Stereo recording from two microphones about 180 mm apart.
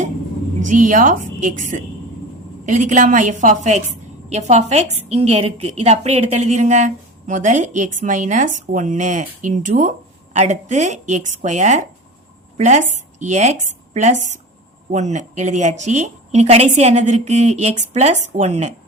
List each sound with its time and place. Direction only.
0.7 s a woman's voice: 45° right (ahead or behind)